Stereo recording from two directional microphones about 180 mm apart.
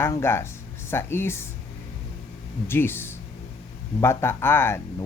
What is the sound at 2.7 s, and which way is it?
Speech, 10° left (ahead or behind).